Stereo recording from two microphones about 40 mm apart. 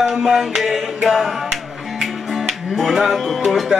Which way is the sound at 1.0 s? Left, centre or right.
Centre.